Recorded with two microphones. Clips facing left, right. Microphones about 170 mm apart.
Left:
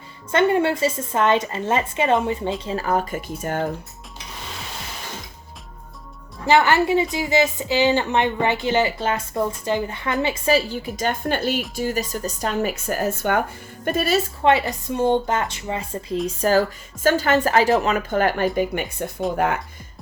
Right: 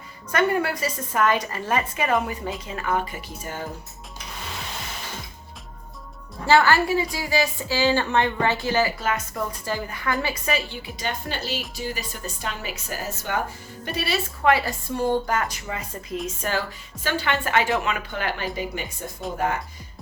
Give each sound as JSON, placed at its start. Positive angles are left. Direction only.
{"t": 0.3, "sound": "a woman's voice", "side_deg": 25}
{"t": 6.4, "sound": "a woman's voice", "side_deg": 20}
{"t": 10.5, "sound": "a woman's voice", "side_deg": 40}
{"t": 14.4, "sound": "a woman's voice", "side_deg": 20}